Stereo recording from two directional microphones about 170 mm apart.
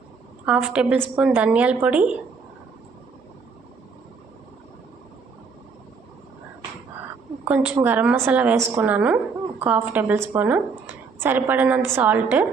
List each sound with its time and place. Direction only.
0.4 s a woman's voice: 5° right (ahead or behind)
7.4 s a woman's voice: 10° right (ahead or behind)